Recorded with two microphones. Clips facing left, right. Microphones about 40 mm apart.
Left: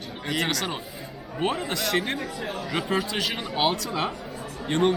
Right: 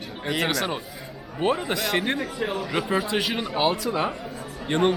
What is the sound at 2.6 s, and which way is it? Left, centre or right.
Speech, centre.